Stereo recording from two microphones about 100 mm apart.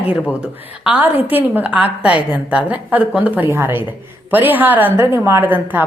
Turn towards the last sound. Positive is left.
turn(degrees=-20)  # may be behind; listen again after turning